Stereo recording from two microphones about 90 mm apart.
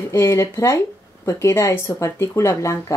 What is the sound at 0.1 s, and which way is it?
Speech, 30° left (ahead or behind).